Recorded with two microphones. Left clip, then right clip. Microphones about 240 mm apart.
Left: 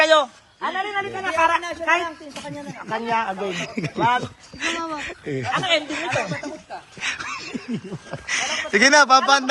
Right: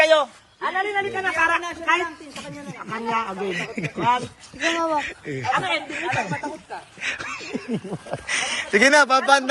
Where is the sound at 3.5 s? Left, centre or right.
Centre.